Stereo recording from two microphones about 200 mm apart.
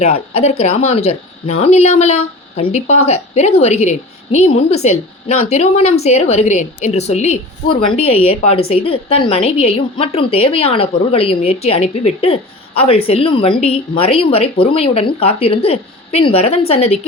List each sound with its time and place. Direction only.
0.0 s a woman's voice: 30° left (ahead or behind)